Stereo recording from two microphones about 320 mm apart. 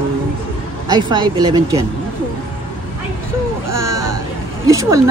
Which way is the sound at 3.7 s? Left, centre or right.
Centre.